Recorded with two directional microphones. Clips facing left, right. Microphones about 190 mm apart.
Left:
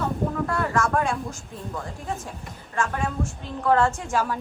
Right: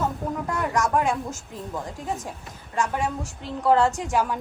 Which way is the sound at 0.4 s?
20° right (ahead or behind).